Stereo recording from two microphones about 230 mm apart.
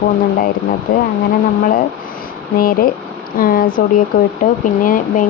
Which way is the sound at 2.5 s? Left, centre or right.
Left.